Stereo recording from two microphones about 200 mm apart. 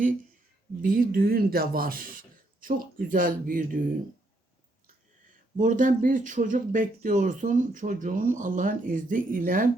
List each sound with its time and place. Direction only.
0.8 s speech: 45° right (ahead or behind)
5.5 s speech: 40° right (ahead or behind)